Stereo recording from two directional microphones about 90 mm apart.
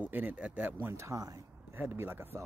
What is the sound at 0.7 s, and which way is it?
Speech, 30° right (ahead or behind).